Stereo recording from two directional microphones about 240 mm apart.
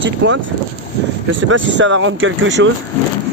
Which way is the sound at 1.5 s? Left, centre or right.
Right.